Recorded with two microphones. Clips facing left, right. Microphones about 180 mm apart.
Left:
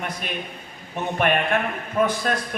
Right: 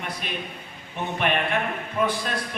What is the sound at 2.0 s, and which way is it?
Speech, 45° left (ahead or behind).